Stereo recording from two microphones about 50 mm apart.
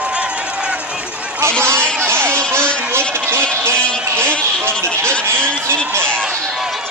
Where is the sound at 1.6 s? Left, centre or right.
Right.